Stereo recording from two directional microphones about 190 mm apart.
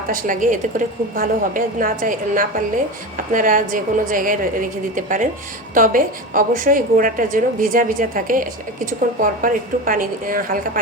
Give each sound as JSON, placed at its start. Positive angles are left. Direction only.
{"t": 0.1, "sound": "a woman's voice", "side_deg": -45}